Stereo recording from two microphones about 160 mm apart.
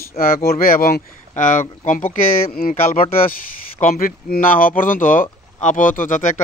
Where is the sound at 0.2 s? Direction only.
50° left (ahead or behind).